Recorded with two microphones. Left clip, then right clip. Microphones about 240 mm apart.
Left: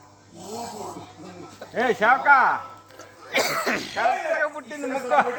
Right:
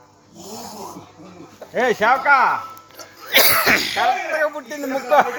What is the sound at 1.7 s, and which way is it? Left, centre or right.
Speech, right.